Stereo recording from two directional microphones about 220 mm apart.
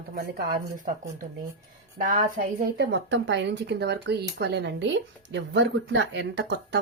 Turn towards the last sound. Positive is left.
turn(degrees=-55)  # may be behind; listen again after turning